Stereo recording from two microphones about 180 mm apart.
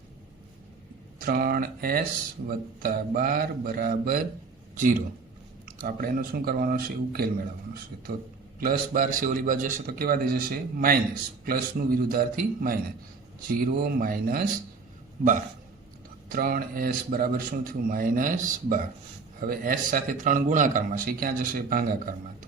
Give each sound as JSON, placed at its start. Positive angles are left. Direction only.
{"t": 1.2, "sound": "a man's voice", "side_deg": -55}
{"t": 8.6, "sound": "a man's voice", "side_deg": -50}
{"t": 16.3, "sound": "a man's voice", "side_deg": -55}